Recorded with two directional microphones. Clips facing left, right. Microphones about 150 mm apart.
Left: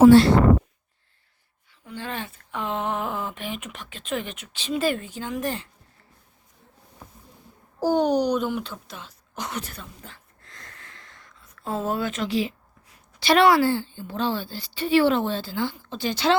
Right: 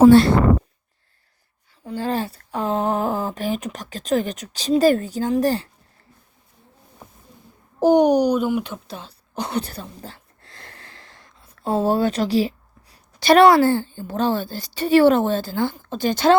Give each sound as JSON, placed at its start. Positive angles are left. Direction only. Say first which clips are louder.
{"t": 0.1, "sound": "speech", "louder": "right 1 dB", "side_deg": -55}
{"t": 1.8, "sound": "speech", "louder": "right 9 dB", "side_deg": -35}
{"t": 7.0, "sound": "a sound", "louder": "right 2 dB", "side_deg": -20}
{"t": 7.8, "sound": "speech", "louder": "right 6 dB", "side_deg": -20}
{"t": 8.9, "sound": "speech", "louder": "right 6 dB", "side_deg": -30}